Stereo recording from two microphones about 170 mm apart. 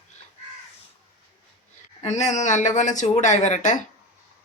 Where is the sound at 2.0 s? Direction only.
40° left (ahead or behind).